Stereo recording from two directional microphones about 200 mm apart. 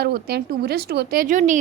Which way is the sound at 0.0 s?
55° right (ahead or behind).